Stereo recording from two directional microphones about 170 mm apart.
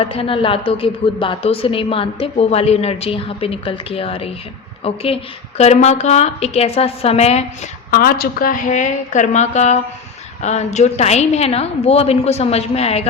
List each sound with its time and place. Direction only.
0.0 s a woman's voice: 35° left (ahead or behind)
7.9 s a woman's voice: 60° left (ahead or behind); by 13.1 s 35° left (ahead or behind)